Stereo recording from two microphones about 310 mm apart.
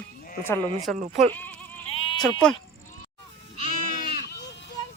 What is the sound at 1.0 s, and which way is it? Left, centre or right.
Speech, right.